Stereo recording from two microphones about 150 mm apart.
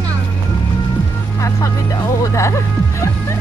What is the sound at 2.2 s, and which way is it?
Music, 20° left (ahead or behind).